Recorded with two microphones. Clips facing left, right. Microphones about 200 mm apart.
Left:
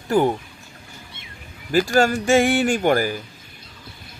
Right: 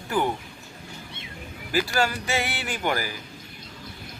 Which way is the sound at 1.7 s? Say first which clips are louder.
Left 7 dB; 45° left (ahead or behind).